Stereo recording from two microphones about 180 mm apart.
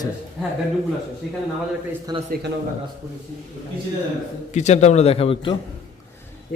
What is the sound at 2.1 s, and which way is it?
Speech, 25° right (ahead or behind).